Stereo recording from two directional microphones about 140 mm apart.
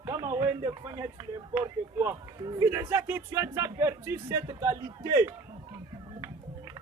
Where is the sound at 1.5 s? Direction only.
15° right (ahead or behind).